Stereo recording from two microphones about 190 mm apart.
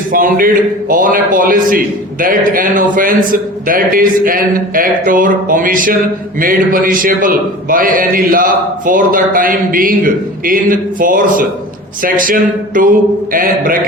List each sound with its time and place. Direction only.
0.1 s a man's voice: 45° right (ahead or behind)